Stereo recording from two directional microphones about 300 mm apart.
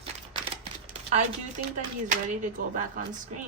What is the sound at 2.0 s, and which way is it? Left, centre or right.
Speech, right.